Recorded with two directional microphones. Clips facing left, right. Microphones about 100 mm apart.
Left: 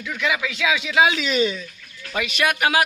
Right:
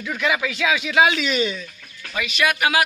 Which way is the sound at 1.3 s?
35° left (ahead or behind).